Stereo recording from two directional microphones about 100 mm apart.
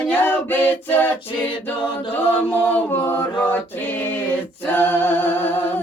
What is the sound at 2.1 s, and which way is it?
Chant, 20° left (ahead or behind).